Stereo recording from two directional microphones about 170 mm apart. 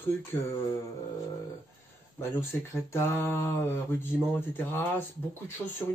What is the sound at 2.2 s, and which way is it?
Speech, 15° left (ahead or behind).